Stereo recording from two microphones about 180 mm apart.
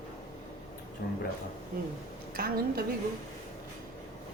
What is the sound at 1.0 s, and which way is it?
Speech, 65° left (ahead or behind).